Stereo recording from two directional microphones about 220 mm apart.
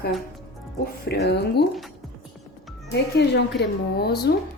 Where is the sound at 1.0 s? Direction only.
50° left (ahead or behind).